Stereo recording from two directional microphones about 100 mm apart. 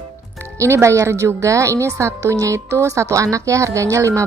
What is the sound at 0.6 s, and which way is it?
A woman's voice, 30° right (ahead or behind).